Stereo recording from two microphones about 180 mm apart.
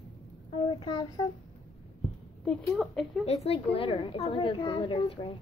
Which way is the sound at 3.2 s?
35° left (ahead or behind).